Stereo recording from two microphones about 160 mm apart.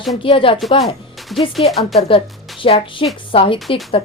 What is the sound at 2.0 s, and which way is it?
A woman's voice, 35° left (ahead or behind).